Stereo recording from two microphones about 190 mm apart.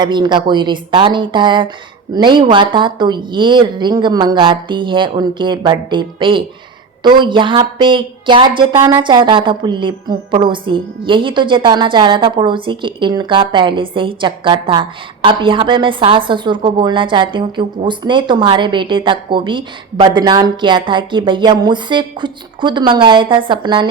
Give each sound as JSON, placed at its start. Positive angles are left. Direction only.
{"t": 0.0, "sound": "a woman's voice", "side_deg": -25}